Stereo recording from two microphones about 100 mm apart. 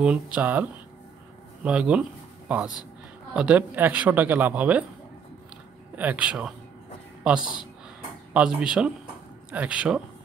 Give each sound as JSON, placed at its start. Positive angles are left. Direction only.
{"t": 0.0, "sound": "speech", "side_deg": -15}
{"t": 5.9, "sound": "speech", "side_deg": -15}
{"t": 8.3, "sound": "speech", "side_deg": -10}